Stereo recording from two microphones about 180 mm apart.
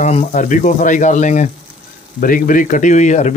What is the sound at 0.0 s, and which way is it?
Speech, 40° left (ahead or behind).